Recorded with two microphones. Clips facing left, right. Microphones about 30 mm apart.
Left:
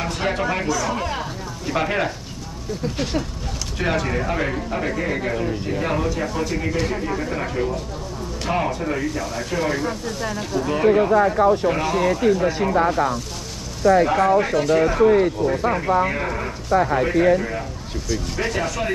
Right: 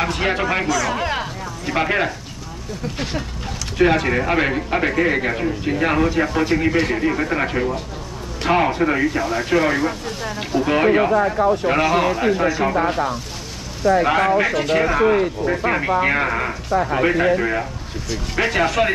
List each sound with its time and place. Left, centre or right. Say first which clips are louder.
0.0 s a man's voice: right 3 dB; right
1.7 s speech: right 2 dB; right
3.7 s a man's voice: right 6 dB; right
14.0 s speech: right 1 dB; right
14.9 s a man's voice: left 1 dB; right